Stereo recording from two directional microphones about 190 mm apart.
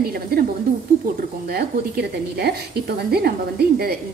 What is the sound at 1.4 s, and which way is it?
A woman's voice, 55° right (ahead or behind).